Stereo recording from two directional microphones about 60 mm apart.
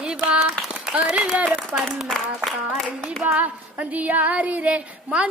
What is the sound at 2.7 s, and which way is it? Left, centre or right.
Hands, centre.